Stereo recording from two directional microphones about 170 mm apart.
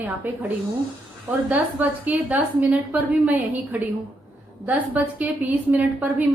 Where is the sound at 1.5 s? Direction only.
10° right (ahead or behind).